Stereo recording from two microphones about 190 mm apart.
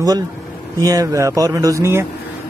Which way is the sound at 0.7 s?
20° right (ahead or behind).